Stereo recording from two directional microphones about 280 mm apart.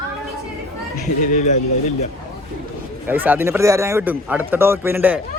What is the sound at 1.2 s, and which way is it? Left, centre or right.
Speech, left.